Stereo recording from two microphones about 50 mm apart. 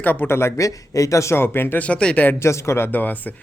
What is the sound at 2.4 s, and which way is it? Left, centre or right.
Speech, left.